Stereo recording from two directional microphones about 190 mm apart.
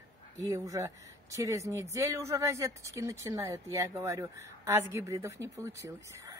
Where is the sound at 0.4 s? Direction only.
15° right (ahead or behind).